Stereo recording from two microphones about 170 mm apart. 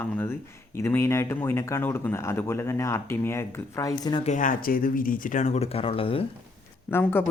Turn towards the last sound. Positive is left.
turn(degrees=10)  # may be behind; listen again after turning